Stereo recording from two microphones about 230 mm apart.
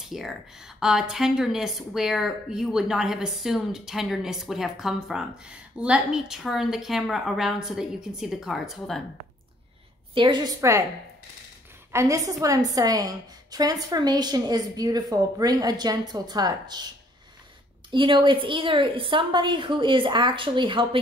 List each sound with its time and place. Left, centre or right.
0.0 s a woman's voice: centre
10.1 s a woman's voice: centre
11.9 s a woman's voice: centre
17.9 s a woman's voice: right